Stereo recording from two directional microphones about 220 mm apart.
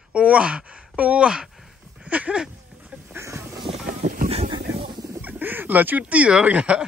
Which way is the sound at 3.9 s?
40° right (ahead or behind).